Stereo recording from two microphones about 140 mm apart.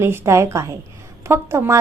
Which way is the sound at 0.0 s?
20° right (ahead or behind).